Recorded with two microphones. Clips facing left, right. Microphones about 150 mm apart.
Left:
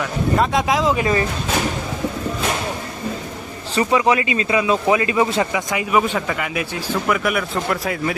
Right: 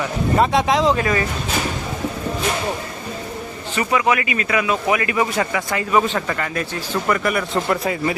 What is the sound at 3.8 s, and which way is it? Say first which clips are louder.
Speech: left 2 dB; 25° left (ahead or behind).